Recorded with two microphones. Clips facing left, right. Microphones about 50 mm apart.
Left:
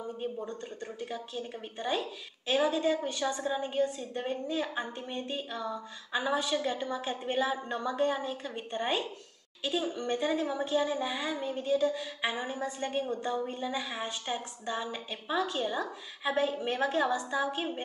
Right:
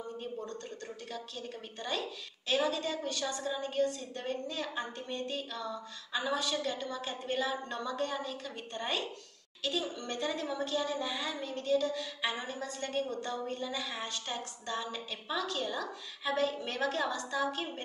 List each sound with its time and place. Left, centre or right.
0.2 s a woman's voice: centre